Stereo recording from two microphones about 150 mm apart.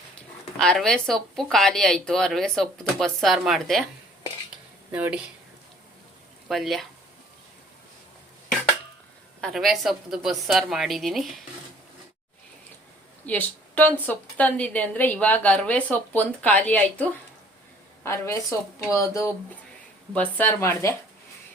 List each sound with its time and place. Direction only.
0.6 s speech: 5° left (ahead or behind)
4.9 s speech: 10° right (ahead or behind)
6.5 s speech: centre (ahead or behind)
9.4 s speech: centre (ahead or behind)
13.2 s a woman's voice: 10° left (ahead or behind)